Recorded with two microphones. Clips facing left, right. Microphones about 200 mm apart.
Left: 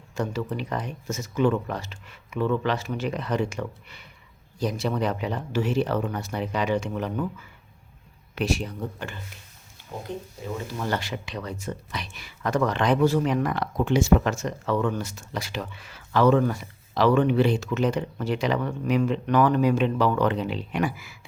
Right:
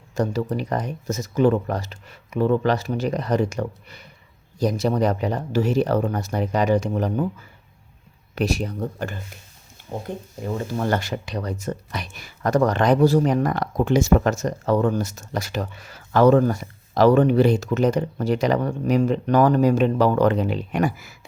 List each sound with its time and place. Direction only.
0.2 s speech: 40° right (ahead or behind)
10.4 s speech: 50° right (ahead or behind)